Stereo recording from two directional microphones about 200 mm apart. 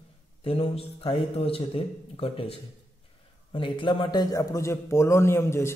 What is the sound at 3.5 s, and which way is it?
A man's voice, 25° left (ahead or behind).